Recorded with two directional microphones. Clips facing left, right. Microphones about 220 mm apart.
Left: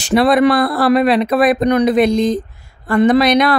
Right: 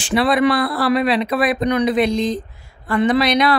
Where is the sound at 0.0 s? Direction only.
45° left (ahead or behind).